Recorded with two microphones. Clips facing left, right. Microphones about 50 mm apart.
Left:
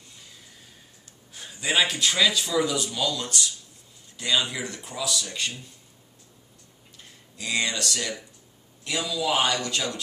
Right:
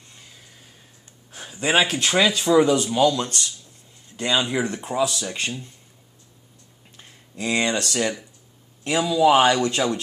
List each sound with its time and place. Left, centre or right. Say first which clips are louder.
1.3 s a sound: right 4 dB; right
1.6 s speech: right 4 dB; right
7.3 s speech: right 5 dB; right